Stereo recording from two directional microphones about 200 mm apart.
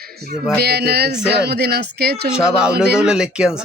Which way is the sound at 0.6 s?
55° right (ahead or behind).